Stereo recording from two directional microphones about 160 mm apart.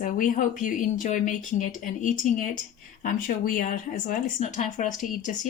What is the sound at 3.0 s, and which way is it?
Speech, 60° left (ahead or behind).